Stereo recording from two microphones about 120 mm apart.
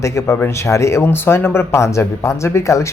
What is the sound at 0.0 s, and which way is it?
Speech, 25° left (ahead or behind).